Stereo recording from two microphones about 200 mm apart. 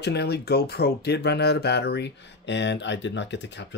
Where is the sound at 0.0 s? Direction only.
55° left (ahead or behind).